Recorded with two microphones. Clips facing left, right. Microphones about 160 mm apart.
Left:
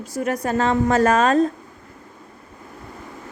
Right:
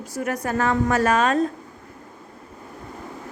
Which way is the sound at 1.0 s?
40° left (ahead or behind).